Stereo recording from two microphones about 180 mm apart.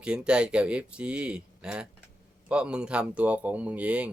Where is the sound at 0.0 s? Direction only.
5° right (ahead or behind).